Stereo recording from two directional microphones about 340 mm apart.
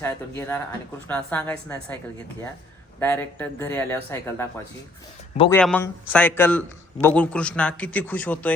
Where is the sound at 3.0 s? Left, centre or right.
Centre.